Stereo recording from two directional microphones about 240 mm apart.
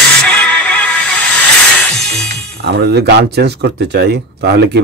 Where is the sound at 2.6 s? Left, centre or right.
Right.